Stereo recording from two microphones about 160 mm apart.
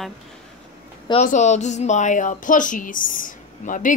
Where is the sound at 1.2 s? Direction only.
50° left (ahead or behind).